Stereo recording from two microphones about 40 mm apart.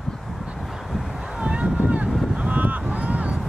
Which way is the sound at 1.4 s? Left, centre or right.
Right.